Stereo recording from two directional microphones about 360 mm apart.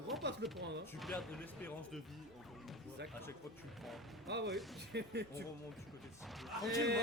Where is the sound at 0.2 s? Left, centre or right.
Right.